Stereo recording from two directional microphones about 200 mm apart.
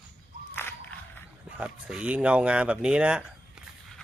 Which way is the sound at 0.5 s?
10° left (ahead or behind).